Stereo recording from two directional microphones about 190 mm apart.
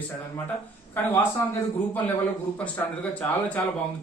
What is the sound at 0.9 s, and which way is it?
Speech, 10° left (ahead or behind).